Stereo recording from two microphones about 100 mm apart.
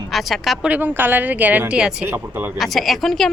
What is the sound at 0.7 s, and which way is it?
A woman's voice, 20° right (ahead or behind).